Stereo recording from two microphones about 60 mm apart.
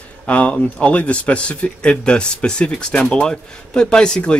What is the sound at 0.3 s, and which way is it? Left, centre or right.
Speech, left.